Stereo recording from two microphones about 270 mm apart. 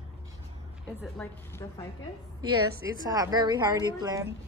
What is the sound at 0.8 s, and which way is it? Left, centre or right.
A woman's voice, centre.